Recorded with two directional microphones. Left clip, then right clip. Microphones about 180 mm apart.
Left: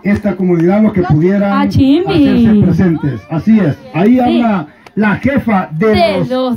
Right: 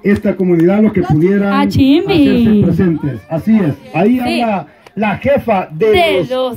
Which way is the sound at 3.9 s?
25° right (ahead or behind).